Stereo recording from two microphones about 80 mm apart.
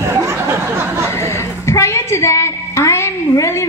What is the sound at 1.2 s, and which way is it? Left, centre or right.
A woman's voice, left.